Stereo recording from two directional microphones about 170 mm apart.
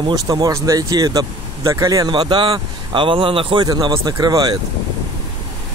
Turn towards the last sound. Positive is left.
turn(degrees=-25)  # may be behind; listen again after turning